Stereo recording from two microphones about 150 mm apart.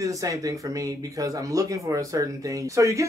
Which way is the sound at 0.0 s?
20° right (ahead or behind).